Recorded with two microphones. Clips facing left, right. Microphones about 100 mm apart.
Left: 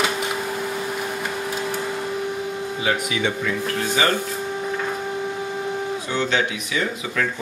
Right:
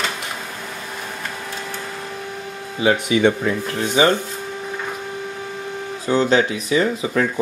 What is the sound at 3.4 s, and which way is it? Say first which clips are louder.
Speech: right 2 dB; 25° right (ahead or behind).